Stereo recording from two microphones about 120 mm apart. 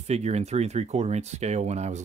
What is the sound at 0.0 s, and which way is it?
Speech, 65° right (ahead or behind).